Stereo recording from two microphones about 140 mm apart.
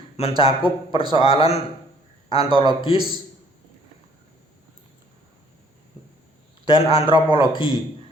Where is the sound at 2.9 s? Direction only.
45° left (ahead or behind).